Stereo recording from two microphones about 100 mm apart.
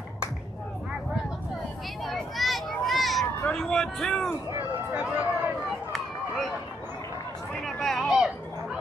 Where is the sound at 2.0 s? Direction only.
Centre (ahead or behind).